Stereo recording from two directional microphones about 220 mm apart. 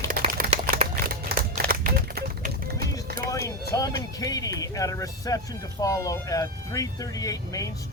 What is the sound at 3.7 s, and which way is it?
Music, 15° left (ahead or behind).